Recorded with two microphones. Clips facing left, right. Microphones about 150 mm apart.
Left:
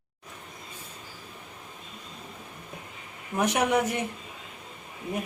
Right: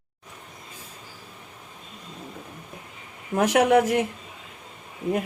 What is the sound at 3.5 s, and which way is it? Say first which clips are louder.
Speech: right 9 dB; 90° right.